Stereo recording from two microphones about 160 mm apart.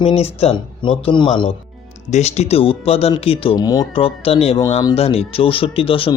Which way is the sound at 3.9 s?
35° left (ahead or behind).